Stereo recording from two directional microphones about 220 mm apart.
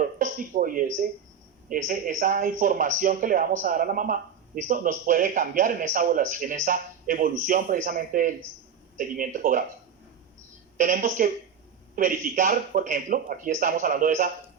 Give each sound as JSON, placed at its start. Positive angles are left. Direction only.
{"t": 0.0, "sound": "a sound", "side_deg": -35}
{"t": 1.7, "sound": "speech", "side_deg": -40}
{"t": 10.8, "sound": "speech", "side_deg": -40}